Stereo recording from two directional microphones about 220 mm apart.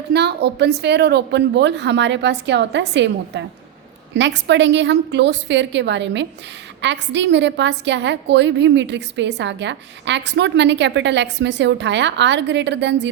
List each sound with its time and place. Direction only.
0.1 s a woman's voice: 50° right (ahead or behind)